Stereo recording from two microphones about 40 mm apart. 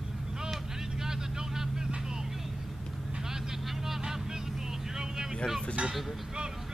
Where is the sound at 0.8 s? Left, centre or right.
Centre.